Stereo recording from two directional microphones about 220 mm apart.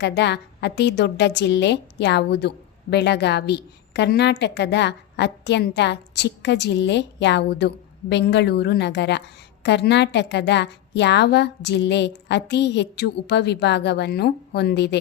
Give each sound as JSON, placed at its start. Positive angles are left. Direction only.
{"t": 0.0, "sound": "a woman's voice", "side_deg": 50}